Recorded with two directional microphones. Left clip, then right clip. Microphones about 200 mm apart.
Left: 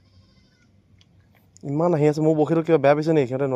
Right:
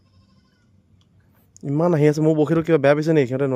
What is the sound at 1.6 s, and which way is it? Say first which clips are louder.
Speech: right 2 dB; 35° right (ahead or behind).